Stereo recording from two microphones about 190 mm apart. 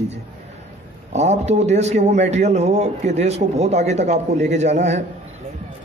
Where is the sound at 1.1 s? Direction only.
35° right (ahead or behind).